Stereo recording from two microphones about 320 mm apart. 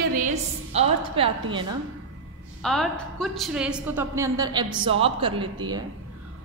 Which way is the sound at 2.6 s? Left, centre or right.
Centre.